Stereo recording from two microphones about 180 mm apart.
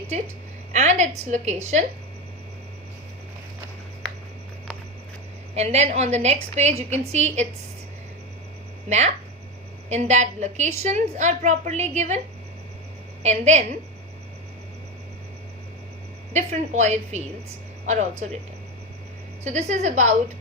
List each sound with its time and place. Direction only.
0.1 s a woman's voice: 40° right (ahead or behind)
5.5 s a woman's voice: 40° right (ahead or behind)
8.9 s a woman's voice: 40° right (ahead or behind)
13.2 s a woman's voice: 40° right (ahead or behind)
16.3 s a woman's voice: 40° right (ahead or behind)
19.5 s a woman's voice: 40° right (ahead or behind)